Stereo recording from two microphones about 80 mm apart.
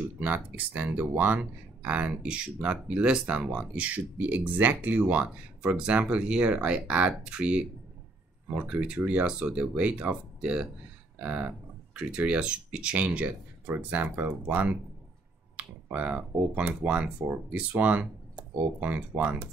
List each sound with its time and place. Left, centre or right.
0.2 s speech: centre